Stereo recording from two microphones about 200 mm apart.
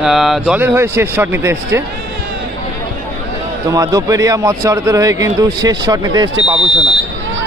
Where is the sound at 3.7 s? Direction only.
15° right (ahead or behind).